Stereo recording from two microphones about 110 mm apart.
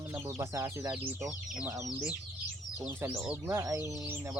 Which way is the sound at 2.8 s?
20° right (ahead or behind).